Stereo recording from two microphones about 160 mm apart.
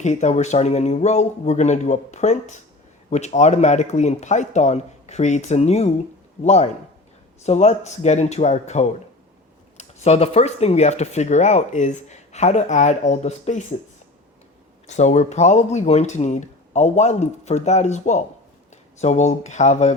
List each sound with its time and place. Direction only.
0.0 s speech: 45° left (ahead or behind)
14.8 s speech: 45° left (ahead or behind)